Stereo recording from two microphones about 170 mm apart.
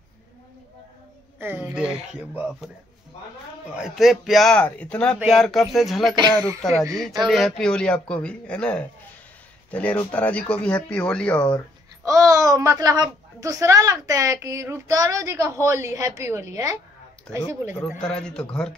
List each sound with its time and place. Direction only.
1.4 s speech: 10° right (ahead or behind)
3.8 s speech: centre (ahead or behind)
12.0 s a child's voice: 20° right (ahead or behind)
17.7 s speech: 5° left (ahead or behind)